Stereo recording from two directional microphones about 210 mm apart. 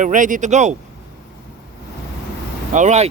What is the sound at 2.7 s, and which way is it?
Speech, 35° right (ahead or behind).